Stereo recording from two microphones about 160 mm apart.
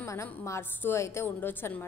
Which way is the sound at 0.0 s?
15° left (ahead or behind).